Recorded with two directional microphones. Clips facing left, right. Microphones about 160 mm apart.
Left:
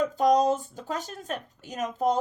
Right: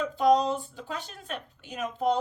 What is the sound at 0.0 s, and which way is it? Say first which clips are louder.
Speech: left 1 dB; 40° left (ahead or behind).